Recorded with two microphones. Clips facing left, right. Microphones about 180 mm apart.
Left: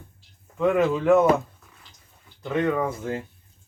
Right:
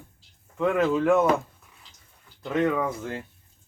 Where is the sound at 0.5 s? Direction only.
Centre (ahead or behind).